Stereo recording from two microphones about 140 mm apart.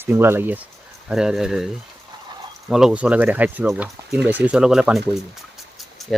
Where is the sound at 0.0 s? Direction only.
15° right (ahead or behind).